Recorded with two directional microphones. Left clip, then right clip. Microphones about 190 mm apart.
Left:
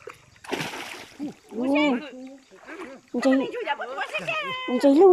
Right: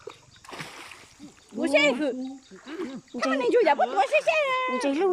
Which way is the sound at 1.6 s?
30° right (ahead or behind).